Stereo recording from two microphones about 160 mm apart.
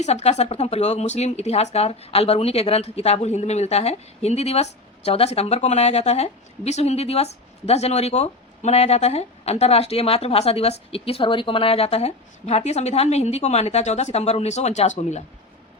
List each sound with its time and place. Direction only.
0.0 s speech: 45° left (ahead or behind)